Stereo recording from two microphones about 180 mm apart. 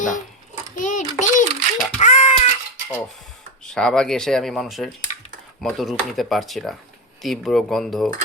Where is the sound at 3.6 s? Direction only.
5° left (ahead or behind).